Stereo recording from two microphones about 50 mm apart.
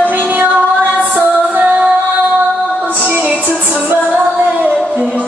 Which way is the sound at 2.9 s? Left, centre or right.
Right.